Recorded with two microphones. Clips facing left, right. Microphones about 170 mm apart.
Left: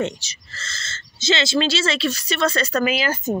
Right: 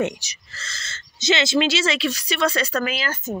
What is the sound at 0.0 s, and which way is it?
Speech, 15° right (ahead or behind).